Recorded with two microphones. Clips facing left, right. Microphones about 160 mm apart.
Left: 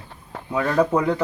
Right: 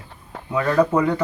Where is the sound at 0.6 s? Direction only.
15° left (ahead or behind).